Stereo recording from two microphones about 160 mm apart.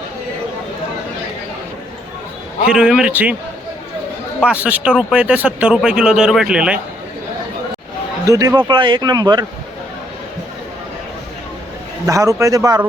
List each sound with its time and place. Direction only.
2.6 s speech: 5° right (ahead or behind)
4.4 s speech: 5° right (ahead or behind)
8.3 s speech: 20° right (ahead or behind)
12.0 s speech: 20° right (ahead or behind)